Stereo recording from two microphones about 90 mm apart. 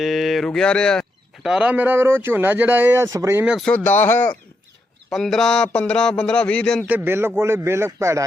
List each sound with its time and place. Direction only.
0.0 s speech: centre (ahead or behind)
1.5 s speech: 10° right (ahead or behind)
1.7 s a man's voice: 20° right (ahead or behind)
3.7 s speech: 20° left (ahead or behind)
5.1 s a man's voice: 5° left (ahead or behind)
6.8 s a man's voice: 20° right (ahead or behind)